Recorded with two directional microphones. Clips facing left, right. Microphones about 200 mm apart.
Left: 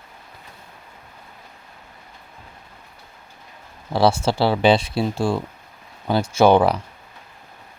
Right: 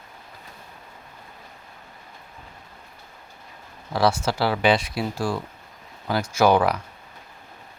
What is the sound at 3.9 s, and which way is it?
Speech, 30° left (ahead or behind).